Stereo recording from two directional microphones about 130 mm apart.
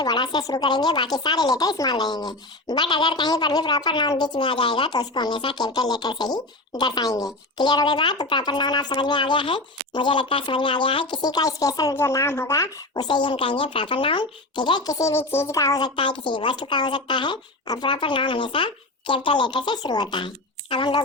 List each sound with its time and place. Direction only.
0.0 s speech: 30° left (ahead or behind)
16.0 s speech: 40° left (ahead or behind)